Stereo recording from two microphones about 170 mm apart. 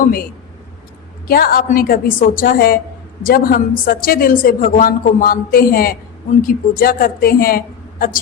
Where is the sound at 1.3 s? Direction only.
60° left (ahead or behind).